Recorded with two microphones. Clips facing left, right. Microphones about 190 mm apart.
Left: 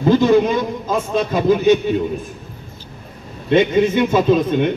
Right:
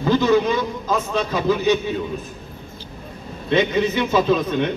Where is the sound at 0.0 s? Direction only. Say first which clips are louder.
Left 4 dB; 50° left (ahead or behind).